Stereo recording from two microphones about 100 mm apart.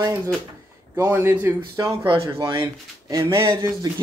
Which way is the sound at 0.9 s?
25° right (ahead or behind).